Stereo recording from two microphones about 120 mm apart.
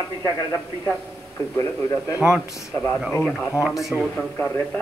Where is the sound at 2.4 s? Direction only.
25° left (ahead or behind).